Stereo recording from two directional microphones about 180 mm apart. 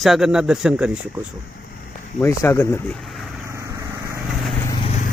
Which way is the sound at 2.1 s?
10° left (ahead or behind).